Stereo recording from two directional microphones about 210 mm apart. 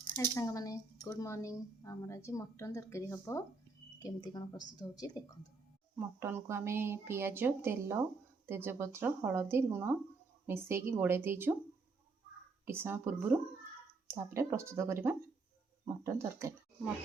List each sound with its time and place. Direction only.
0.2 s a woman's voice: 15° left (ahead or behind)
6.0 s a woman's voice: 10° right (ahead or behind)
12.6 s a woman's voice: 10° right (ahead or behind)